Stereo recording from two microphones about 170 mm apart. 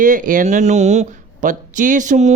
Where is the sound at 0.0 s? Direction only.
50° right (ahead or behind).